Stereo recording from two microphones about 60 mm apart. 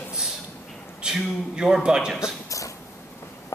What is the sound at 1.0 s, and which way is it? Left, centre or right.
A man's voice, centre.